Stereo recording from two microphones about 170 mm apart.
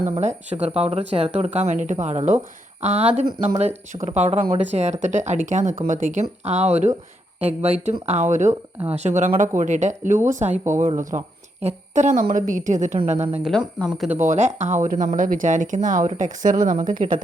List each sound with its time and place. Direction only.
0.0 s a woman's voice: 40° right (ahead or behind)